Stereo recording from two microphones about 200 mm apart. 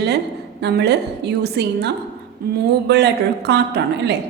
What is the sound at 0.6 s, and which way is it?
A woman's voice, 55° right (ahead or behind).